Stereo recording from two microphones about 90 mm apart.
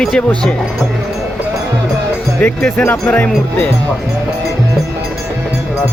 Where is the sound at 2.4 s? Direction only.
15° left (ahead or behind).